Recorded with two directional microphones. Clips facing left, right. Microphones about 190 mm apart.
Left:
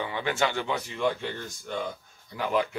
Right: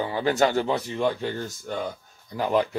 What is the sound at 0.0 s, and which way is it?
Speech, 35° right (ahead or behind).